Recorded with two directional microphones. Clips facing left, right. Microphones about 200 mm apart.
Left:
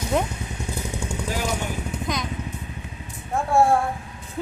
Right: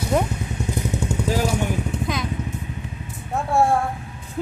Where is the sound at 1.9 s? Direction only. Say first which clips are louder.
Right 4 dB; 30° right (ahead or behind).